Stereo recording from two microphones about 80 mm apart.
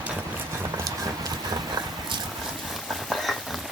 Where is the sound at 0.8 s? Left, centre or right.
Right.